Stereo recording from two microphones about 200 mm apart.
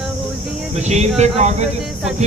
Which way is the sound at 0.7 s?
35° right (ahead or behind).